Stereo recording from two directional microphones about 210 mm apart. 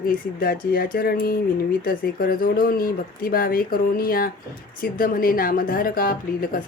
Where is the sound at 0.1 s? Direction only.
45° left (ahead or behind).